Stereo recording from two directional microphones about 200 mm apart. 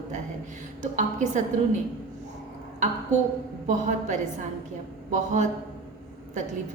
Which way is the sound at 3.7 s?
35° right (ahead or behind).